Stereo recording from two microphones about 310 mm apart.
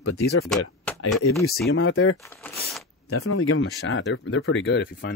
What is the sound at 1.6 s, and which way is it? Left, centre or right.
Speech, left.